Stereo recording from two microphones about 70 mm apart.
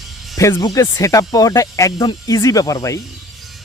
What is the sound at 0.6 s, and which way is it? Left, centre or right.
Speech, left.